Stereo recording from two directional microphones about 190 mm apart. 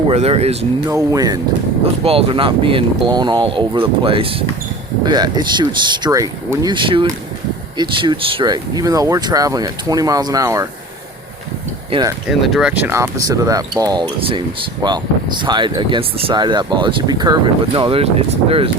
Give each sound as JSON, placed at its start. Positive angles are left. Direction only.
{"t": 0.1, "sound": "speech", "side_deg": -35}
{"t": 0.9, "sound": "speech", "side_deg": -15}
{"t": 2.0, "sound": "speech", "side_deg": -30}
{"t": 11.9, "sound": "speech", "side_deg": -25}
{"t": 12.3, "sound": "speech", "side_deg": 0}